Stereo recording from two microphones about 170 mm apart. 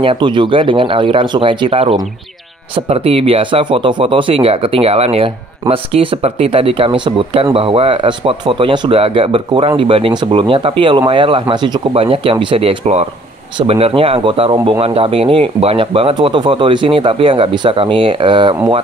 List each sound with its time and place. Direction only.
0.0 s speech: 30° right (ahead or behind)